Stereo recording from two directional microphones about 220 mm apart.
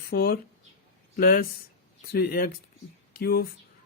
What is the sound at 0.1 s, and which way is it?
Speech, 45° left (ahead or behind).